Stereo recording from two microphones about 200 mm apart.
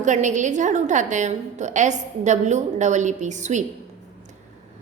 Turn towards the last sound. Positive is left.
turn(degrees=-35)  # may be behind; listen again after turning